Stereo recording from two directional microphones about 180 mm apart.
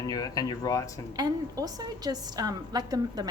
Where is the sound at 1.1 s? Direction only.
20° right (ahead or behind).